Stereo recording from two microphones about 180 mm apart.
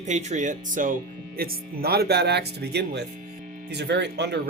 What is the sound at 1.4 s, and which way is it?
Speech, 60° right (ahead or behind).